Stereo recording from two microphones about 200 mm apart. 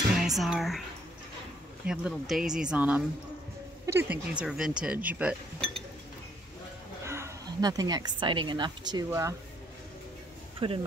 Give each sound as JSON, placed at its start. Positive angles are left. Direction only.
{"t": 0.2, "sound": "speech", "side_deg": 0}
{"t": 1.9, "sound": "speech", "side_deg": 0}
{"t": 5.6, "sound": "chink", "side_deg": 0}
{"t": 7.1, "sound": "a woman's voice", "side_deg": -15}
{"t": 10.6, "sound": "speech", "side_deg": -25}